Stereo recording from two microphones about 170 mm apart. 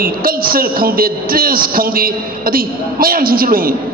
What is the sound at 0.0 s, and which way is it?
A man's voice, 60° right (ahead or behind).